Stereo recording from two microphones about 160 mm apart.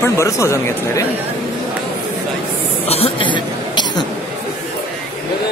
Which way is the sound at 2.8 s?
35° left (ahead or behind).